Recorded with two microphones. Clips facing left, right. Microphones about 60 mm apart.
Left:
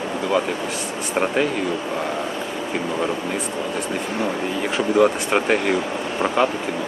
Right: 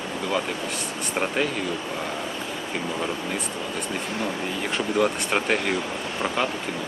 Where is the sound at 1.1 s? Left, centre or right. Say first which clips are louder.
Left 5 dB; centre.